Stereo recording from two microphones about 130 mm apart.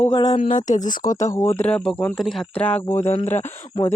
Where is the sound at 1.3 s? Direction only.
20° left (ahead or behind).